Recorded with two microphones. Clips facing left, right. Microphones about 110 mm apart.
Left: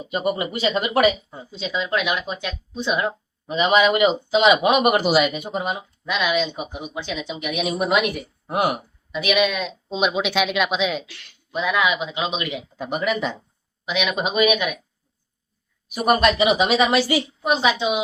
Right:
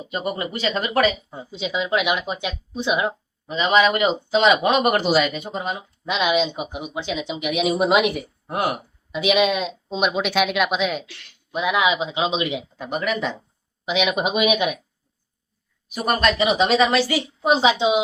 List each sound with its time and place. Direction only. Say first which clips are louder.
0.0 s speech: left 3 dB; 15° left (ahead or behind)
1.3 s speech: right 1 dB; 15° right (ahead or behind)
3.4 s speech: even; 20° left (ahead or behind)
6.1 s a man's voice: right 2 dB; 25° right (ahead or behind)
6.5 s speech: right 1 dB; 15° right (ahead or behind)
8.4 s speech: left 2 dB; 15° left (ahead or behind)
9.1 s a man's voice: right 2 dB; 20° right (ahead or behind)
9.9 s speech: even; centre (ahead or behind)
11.5 s a man's voice: right 1 dB; 15° right (ahead or behind)
12.7 s speech: left 1 dB; 10° left (ahead or behind)
13.8 s speech: right 2 dB; 20° right (ahead or behind)
16.0 s speech: left 2 dB; 15° left (ahead or behind)
17.4 s a man's voice: right 5 dB; 20° right (ahead or behind)